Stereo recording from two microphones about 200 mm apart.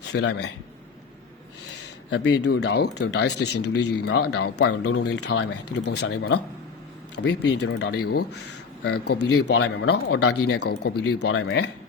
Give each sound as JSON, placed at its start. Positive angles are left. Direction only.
{"t": 0.1, "sound": "speech", "side_deg": 60}
{"t": 2.0, "sound": "speech", "side_deg": 60}
{"t": 5.0, "sound": "speech", "side_deg": 60}
{"t": 5.5, "sound": "speech", "side_deg": 55}
{"t": 10.4, "sound": "speech", "side_deg": 55}
{"t": 11.3, "sound": "speech", "side_deg": 65}